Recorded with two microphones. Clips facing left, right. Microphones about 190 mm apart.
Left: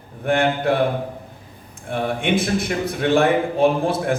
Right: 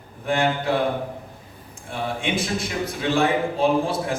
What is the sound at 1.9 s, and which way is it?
A man's voice, 55° left (ahead or behind).